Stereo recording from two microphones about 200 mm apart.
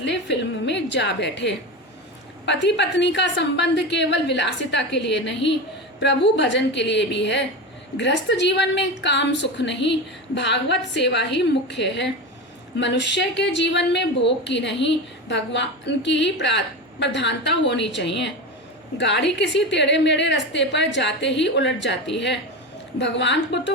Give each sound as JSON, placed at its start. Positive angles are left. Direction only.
{"t": 0.0, "sound": "a woman's voice", "side_deg": 60}